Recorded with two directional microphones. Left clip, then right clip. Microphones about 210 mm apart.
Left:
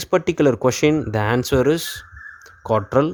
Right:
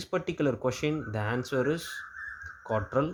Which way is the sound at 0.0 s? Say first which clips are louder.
Left 12 dB; 45° left (ahead or behind).